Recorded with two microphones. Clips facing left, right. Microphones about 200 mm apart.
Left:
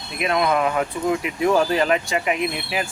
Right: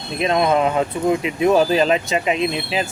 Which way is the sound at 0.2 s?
25° right (ahead or behind).